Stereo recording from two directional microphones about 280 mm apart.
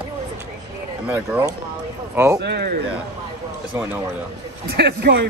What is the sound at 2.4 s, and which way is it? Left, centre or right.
Speech, right.